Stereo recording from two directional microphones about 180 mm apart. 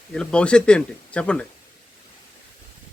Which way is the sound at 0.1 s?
5° left (ahead or behind).